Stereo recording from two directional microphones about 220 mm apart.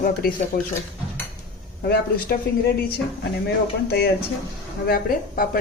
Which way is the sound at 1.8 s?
45° left (ahead or behind).